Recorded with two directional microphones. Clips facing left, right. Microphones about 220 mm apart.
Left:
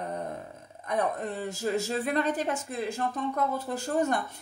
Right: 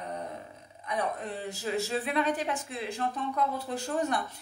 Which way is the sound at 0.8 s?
45° left (ahead or behind).